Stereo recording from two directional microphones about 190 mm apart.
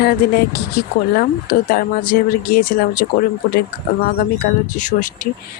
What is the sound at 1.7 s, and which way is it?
Speech, 50° left (ahead or behind).